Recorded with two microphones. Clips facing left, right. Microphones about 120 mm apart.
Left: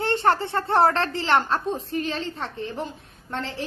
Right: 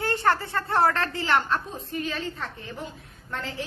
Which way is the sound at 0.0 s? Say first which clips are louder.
Left 3 dB; 25° left (ahead or behind).